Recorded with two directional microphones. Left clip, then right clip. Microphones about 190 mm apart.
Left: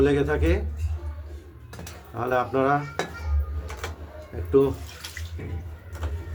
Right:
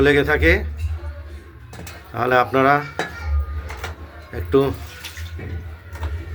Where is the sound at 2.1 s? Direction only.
15° right (ahead or behind).